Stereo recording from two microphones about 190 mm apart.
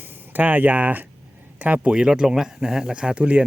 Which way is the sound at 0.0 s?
10° right (ahead or behind).